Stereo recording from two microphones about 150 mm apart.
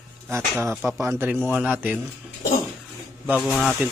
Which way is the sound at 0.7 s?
Centre (ahead or behind).